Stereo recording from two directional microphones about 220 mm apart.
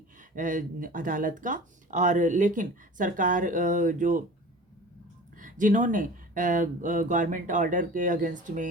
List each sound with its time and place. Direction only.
0.2 s speech: 35° right (ahead or behind)
5.4 s speech: 35° right (ahead or behind)